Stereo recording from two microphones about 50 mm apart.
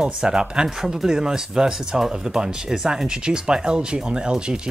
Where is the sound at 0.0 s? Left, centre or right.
Centre.